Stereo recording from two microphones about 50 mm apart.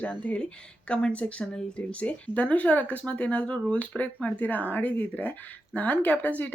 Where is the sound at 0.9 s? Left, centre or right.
Left.